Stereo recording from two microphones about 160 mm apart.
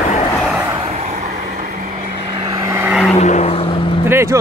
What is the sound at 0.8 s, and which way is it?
Vehicle, 40° right (ahead or behind).